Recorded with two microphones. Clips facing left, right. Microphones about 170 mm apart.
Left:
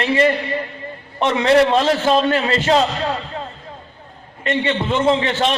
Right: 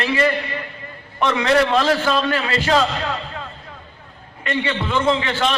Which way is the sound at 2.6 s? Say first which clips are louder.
Even; 30° left (ahead or behind).